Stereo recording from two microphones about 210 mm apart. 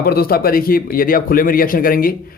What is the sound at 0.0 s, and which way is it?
Speech, 45° left (ahead or behind).